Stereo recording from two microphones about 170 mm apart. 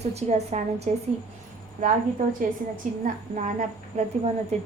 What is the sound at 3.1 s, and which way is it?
A woman's voice, 50° right (ahead or behind).